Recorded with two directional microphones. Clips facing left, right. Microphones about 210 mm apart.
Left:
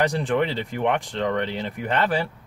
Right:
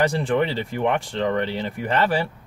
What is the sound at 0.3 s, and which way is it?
Speech, centre (ahead or behind).